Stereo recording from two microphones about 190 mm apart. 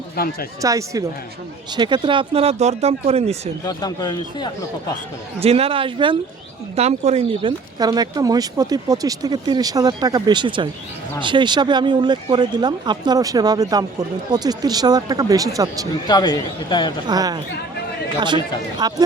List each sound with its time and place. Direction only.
0.2 s speech: 55° left (ahead or behind)
0.6 s speech: 15° right (ahead or behind); by 3.5 s 35° right (ahead or behind)
3.6 s a man's voice: 20° left (ahead or behind)
5.4 s speech: 30° right (ahead or behind)
7.8 s speech: 20° right (ahead or behind)
16.0 s a man's voice: 20° left (ahead or behind)
17.1 s speech: 20° right (ahead or behind)